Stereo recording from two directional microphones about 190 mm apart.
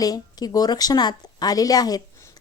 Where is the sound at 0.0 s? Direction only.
20° left (ahead or behind).